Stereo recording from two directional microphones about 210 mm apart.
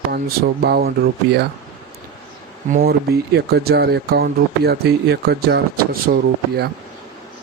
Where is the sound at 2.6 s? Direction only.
35° right (ahead or behind).